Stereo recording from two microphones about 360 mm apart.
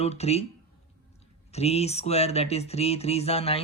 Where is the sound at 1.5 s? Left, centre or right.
Centre.